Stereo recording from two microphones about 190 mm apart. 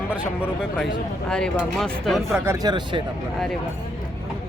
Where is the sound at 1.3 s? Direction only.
5° left (ahead or behind).